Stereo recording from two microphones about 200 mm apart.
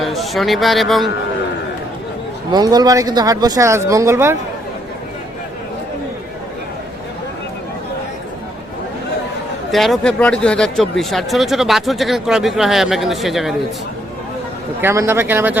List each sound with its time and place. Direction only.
0.0 s a man's voice: centre (ahead or behind)
2.5 s speech: 20° right (ahead or behind)
9.7 s speech: centre (ahead or behind)
14.8 s speech: 10° right (ahead or behind)